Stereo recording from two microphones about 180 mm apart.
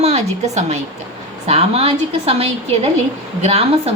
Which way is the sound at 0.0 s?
35° right (ahead or behind).